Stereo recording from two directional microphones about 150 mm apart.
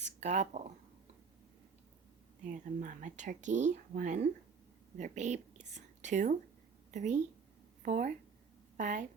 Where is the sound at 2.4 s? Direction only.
60° right (ahead or behind).